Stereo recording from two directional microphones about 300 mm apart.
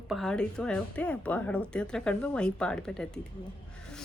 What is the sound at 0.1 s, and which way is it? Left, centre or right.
Speech, centre.